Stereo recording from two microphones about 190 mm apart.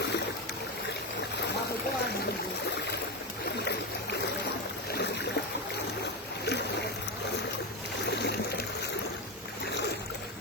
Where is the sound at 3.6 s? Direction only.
60° left (ahead or behind).